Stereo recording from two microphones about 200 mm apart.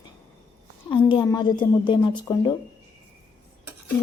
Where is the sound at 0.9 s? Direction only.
25° left (ahead or behind).